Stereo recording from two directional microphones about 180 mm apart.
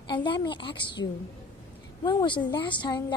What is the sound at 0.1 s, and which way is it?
Speech, 25° left (ahead or behind).